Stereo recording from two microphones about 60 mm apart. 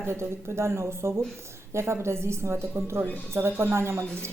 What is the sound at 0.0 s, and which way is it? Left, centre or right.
A woman's voice, right.